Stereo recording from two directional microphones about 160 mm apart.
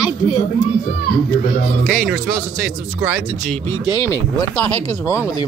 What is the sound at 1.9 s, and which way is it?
Speech, 5° right (ahead or behind).